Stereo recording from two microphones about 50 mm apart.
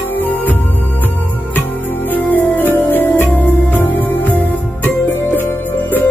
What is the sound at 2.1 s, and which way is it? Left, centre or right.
Music, left.